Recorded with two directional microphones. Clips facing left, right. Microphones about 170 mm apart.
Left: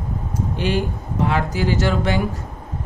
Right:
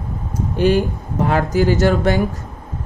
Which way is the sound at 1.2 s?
45° right (ahead or behind).